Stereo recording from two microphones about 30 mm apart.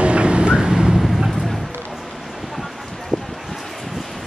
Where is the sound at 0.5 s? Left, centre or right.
Right.